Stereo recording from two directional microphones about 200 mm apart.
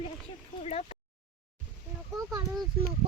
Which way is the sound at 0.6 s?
30° left (ahead or behind).